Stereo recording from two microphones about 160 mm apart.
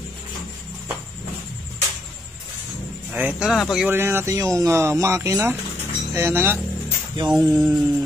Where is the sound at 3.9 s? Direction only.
15° right (ahead or behind).